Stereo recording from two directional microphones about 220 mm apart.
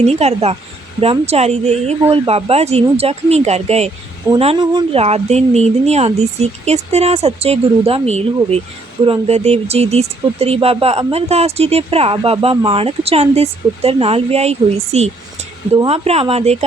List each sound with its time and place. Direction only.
0.0 s speech: 30° right (ahead or behind)